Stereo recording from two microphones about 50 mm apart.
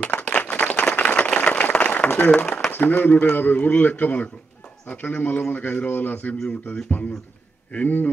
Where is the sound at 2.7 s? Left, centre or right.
Left.